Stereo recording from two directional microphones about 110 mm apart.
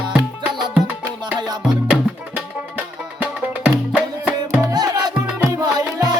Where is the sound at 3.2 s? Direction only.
10° right (ahead or behind).